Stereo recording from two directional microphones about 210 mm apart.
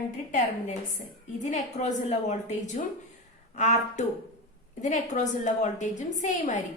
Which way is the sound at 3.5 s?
35° left (ahead or behind).